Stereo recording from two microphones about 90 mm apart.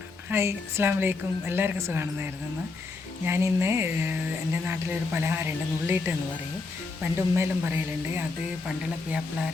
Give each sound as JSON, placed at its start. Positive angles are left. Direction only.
{"t": 0.3, "sound": "a woman's voice", "side_deg": -25}
{"t": 3.2, "sound": "a woman's voice", "side_deg": -30}